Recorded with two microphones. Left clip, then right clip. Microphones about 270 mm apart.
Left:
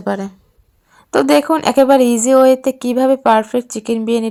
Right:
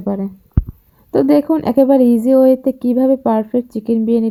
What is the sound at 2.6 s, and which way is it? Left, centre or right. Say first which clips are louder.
Speech: left 1 dB; left.